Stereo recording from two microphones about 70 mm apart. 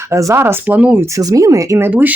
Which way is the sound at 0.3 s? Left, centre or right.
Right.